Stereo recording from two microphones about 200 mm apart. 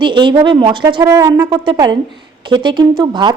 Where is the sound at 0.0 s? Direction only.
25° right (ahead or behind).